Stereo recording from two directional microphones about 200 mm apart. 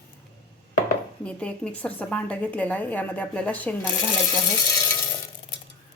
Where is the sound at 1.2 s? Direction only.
5° left (ahead or behind).